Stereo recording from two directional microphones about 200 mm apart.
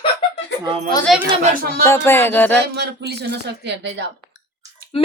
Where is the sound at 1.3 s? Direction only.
40° right (ahead or behind).